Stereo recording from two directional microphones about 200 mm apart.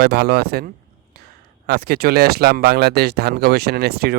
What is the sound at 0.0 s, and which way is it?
Speech, 50° right (ahead or behind).